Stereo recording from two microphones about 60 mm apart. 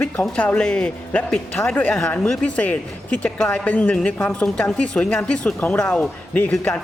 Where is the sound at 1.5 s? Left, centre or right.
Left.